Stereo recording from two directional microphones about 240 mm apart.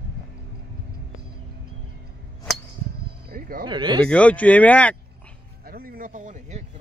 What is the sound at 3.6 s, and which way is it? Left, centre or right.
Speech, centre.